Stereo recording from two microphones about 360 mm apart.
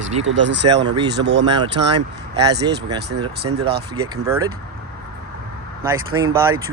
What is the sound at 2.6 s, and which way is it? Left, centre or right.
Speech, centre.